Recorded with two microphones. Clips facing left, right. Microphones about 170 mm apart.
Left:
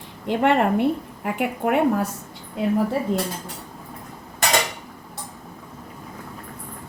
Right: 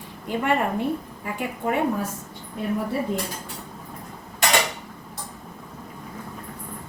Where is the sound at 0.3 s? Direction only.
75° left (ahead or behind).